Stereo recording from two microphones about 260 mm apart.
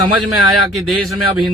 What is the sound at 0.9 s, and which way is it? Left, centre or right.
Music, centre.